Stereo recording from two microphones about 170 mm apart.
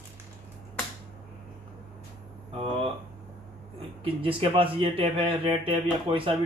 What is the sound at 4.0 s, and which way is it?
Speech, 30° right (ahead or behind).